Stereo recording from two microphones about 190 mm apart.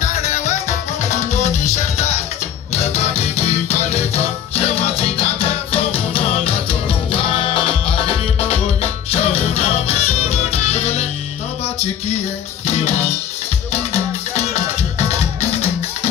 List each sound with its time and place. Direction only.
0.0 s music: 35° left (ahead or behind)
13.9 s music: 35° left (ahead or behind)